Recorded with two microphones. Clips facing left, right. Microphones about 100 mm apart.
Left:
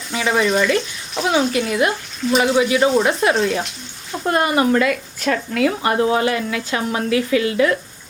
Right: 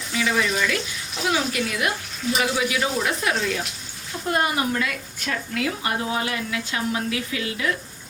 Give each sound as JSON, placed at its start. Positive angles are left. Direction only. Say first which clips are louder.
{"t": 0.3, "sound": "speech", "louder": "left 7 dB", "side_deg": 35}
{"t": 4.3, "sound": "a woman's voice", "louder": "left 7 dB", "side_deg": 60}